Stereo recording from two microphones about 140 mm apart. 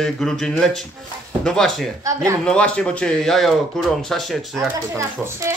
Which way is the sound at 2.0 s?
25° right (ahead or behind).